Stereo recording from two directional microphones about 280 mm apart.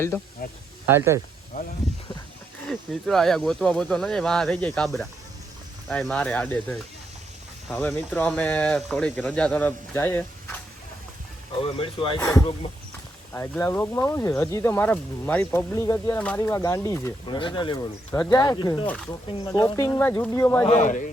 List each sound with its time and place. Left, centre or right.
0.9 s speech: centre
1.5 s speech: left
2.6 s speech: centre
11.6 s speech: centre
20.7 s speech: left